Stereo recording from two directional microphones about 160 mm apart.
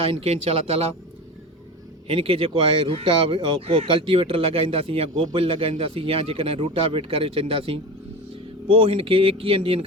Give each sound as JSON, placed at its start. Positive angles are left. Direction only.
{"t": 0.0, "sound": "speech", "side_deg": -35}
{"t": 2.0, "sound": "speech", "side_deg": -35}